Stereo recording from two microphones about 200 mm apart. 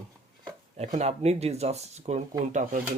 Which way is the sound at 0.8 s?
35° right (ahead or behind).